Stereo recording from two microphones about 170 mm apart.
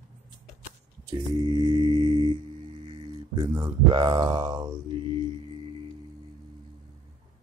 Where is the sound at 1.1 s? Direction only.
25° right (ahead or behind).